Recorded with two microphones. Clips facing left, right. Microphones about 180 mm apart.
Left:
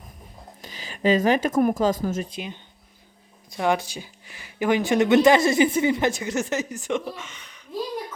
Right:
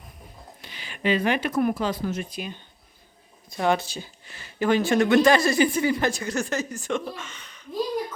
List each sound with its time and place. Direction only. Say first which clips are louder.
0.6 s speech: left 4 dB; 40° left (ahead or behind)
2.3 s speech: even; 20° left (ahead or behind)
3.6 s speech: even; 15° left (ahead or behind)